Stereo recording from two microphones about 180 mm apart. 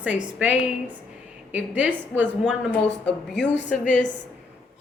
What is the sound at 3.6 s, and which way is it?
Speech, 45° left (ahead or behind).